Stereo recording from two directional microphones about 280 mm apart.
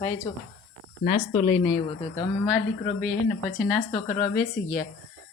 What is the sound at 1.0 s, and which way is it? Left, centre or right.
Speech, left.